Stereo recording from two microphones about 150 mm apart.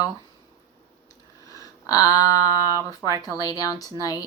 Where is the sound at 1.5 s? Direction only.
25° left (ahead or behind).